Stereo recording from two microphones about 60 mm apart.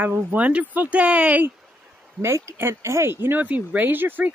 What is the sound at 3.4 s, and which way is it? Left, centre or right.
Speech, right.